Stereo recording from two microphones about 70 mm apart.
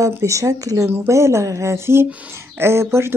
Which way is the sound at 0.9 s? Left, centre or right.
Right.